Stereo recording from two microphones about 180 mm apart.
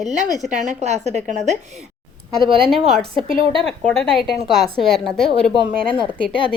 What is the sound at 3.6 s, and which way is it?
A woman's voice, 5° left (ahead or behind).